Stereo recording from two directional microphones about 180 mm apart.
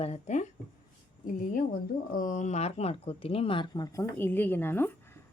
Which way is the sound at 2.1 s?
45° left (ahead or behind).